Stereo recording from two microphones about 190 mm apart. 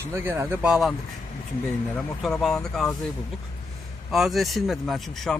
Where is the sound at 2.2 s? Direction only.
Centre (ahead or behind).